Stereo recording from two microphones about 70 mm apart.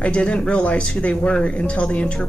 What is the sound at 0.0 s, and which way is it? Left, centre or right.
A man's voice, centre.